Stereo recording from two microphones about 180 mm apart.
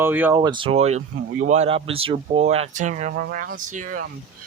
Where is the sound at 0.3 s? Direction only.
25° right (ahead or behind); by 4.0 s 45° right (ahead or behind).